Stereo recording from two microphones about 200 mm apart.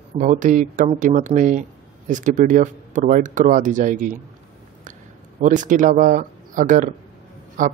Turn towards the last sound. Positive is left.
turn(degrees=-40)  # may be behind; listen again after turning